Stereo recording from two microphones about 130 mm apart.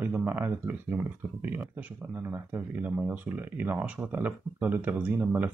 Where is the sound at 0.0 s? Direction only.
15° right (ahead or behind).